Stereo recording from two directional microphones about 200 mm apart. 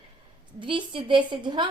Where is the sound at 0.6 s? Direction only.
25° right (ahead or behind).